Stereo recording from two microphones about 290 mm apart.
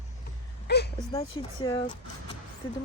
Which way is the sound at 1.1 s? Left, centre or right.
Centre.